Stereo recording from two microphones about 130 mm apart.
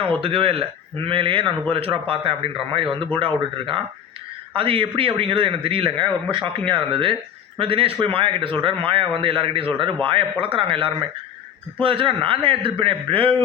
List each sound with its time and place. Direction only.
0.2 s a man's voice: 45° right (ahead or behind)